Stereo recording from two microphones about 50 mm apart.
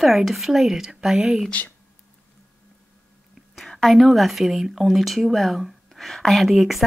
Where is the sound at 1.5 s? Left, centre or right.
Left.